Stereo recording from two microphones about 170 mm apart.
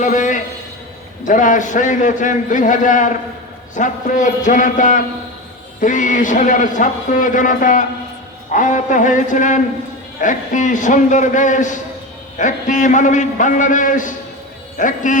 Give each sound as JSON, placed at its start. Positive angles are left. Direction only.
{"t": 0.0, "sound": "a man's voice", "side_deg": 50}